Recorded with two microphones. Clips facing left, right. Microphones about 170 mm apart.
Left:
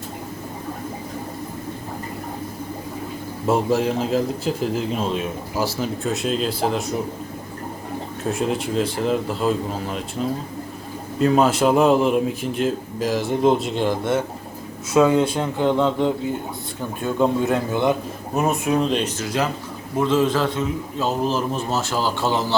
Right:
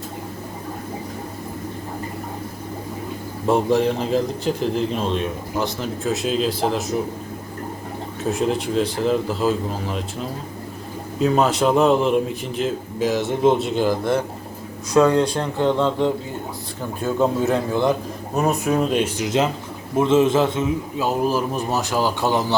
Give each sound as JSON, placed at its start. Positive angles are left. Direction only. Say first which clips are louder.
{"t": 3.4, "sound": "a man's voice", "louder": "right 2 dB", "side_deg": 0}
{"t": 8.2, "sound": "a man's voice", "louder": "right 2 dB", "side_deg": 0}
{"t": 20.0, "sound": "a man's voice", "louder": "right 3 dB", "side_deg": -20}